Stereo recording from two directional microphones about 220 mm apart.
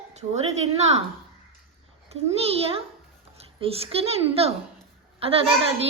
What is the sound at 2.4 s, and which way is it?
A child's voice, 25° right (ahead or behind).